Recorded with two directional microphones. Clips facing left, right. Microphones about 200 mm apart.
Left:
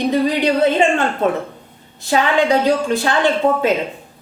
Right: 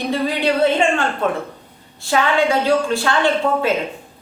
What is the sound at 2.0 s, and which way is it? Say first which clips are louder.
A woman's voice: left 1 dB; 20° left (ahead or behind).